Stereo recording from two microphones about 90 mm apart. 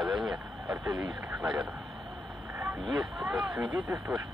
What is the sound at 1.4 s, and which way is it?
Speech, 5° right (ahead or behind).